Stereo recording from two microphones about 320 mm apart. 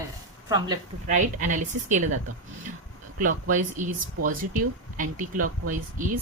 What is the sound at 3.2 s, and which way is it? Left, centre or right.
Speech, right.